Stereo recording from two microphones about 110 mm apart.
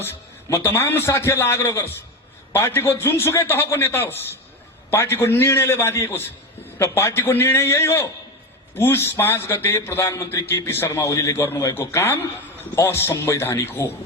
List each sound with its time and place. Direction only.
0.4 s a man's voice: 20° left (ahead or behind)